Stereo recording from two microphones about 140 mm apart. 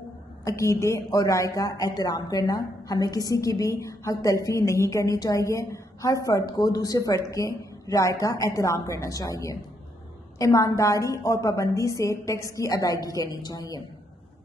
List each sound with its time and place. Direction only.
0.5 s speech: 20° left (ahead or behind)